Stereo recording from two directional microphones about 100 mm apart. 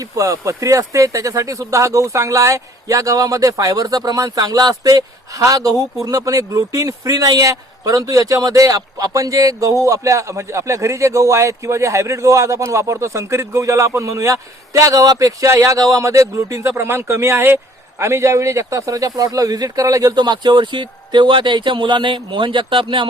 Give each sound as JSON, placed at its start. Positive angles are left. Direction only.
{"t": 0.2, "sound": "a man's voice", "side_deg": -35}